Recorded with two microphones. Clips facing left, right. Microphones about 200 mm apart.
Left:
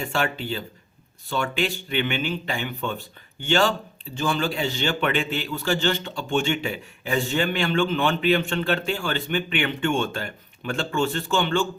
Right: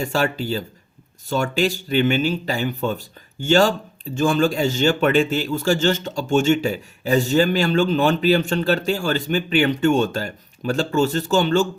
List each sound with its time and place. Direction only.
0.0 s a man's voice: 40° right (ahead or behind)